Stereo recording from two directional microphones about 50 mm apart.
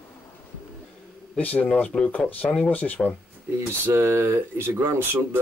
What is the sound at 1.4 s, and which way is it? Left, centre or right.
Speech, left.